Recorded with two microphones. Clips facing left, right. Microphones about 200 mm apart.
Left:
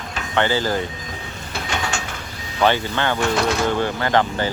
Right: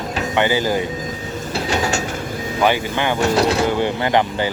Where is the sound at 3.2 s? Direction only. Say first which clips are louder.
Right 5 dB; 35° right (ahead or behind).